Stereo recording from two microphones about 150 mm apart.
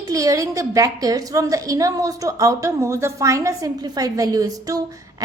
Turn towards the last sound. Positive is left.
turn(degrees=-25)  # may be behind; listen again after turning